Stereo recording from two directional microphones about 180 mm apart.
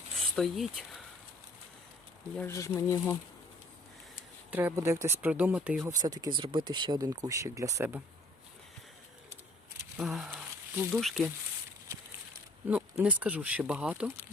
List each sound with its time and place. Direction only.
0.2 s speech: centre (ahead or behind)
2.3 s speech: 15° left (ahead or behind)
4.5 s speech: 15° right (ahead or behind)
6.0 s speech: 20° right (ahead or behind)
10.0 s speech: centre (ahead or behind)
12.6 s speech: 10° right (ahead or behind)